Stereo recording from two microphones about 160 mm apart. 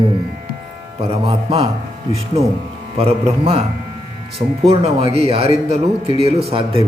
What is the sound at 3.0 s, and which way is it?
Speech, 40° right (ahead or behind).